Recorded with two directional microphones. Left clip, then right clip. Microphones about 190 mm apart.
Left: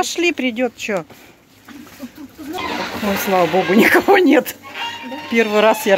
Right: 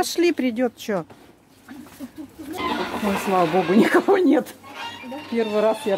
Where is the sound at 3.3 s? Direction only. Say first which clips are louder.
Left 4 dB; centre (ahead or behind).